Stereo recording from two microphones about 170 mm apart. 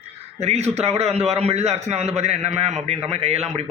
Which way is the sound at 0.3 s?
40° right (ahead or behind).